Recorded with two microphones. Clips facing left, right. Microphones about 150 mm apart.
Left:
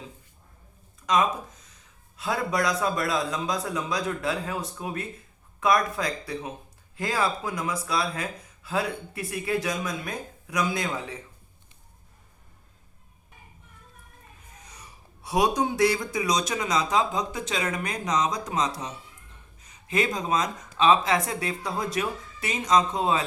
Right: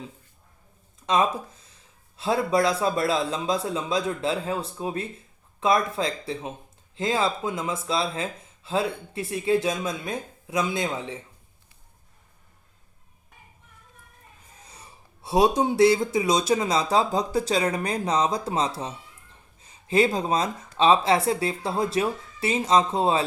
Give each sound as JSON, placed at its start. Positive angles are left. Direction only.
{"t": 1.0, "sound": "speech", "side_deg": -30}
{"t": 14.6, "sound": "speech", "side_deg": -30}